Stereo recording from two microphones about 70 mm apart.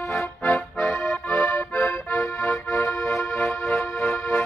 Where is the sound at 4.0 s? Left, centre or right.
Left.